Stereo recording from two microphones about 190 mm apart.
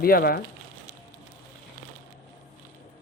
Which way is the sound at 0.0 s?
55° left (ahead or behind).